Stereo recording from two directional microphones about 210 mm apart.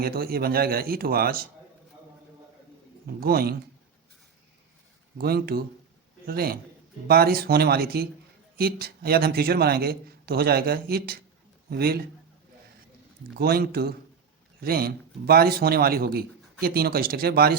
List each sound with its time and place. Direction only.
0.0 s speech: 45° right (ahead or behind)
3.2 s speech: 45° right (ahead or behind)
5.1 s speech: 45° right (ahead or behind)
13.4 s speech: 45° right (ahead or behind)